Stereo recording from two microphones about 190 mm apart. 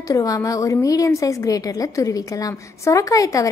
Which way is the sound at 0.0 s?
20° left (ahead or behind).